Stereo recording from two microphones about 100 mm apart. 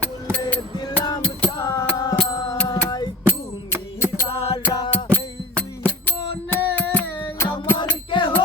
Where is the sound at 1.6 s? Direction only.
35° left (ahead or behind).